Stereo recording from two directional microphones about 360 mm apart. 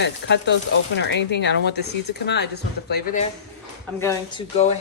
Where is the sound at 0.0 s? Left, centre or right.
Left.